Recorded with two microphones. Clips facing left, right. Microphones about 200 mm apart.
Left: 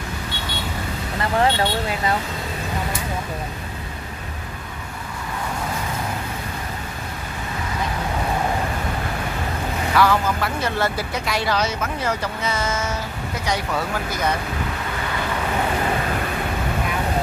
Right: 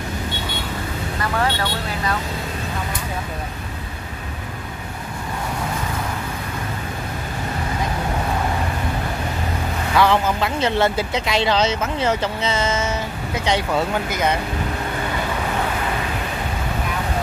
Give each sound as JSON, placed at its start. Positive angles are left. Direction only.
{"t": 1.2, "sound": "speech", "side_deg": 25}
{"t": 9.9, "sound": "speech", "side_deg": -20}